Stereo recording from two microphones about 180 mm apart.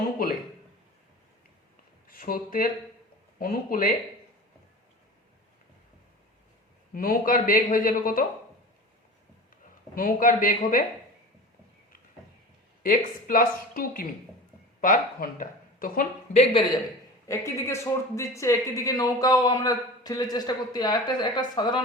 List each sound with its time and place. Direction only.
2.0 s speech: 55° left (ahead or behind)
6.9 s speech: 55° left (ahead or behind)
9.9 s speech: 50° left (ahead or behind)
12.8 s speech: 50° left (ahead or behind)
16.4 s a man's voice: 30° left (ahead or behind)
17.2 s a man's voice: 15° left (ahead or behind)